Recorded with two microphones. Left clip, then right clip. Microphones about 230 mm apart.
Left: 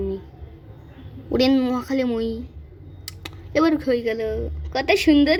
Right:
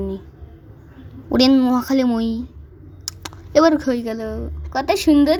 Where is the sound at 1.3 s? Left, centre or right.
Right.